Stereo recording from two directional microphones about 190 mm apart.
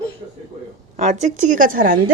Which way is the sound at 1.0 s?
40° right (ahead or behind).